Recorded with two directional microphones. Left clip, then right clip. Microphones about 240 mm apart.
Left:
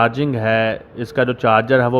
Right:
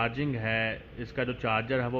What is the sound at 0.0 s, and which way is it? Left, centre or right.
A man's voice, left.